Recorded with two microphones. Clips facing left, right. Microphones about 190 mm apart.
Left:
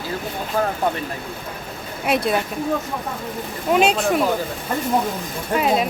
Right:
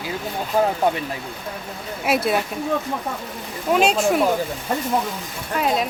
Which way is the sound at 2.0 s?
5° right (ahead or behind).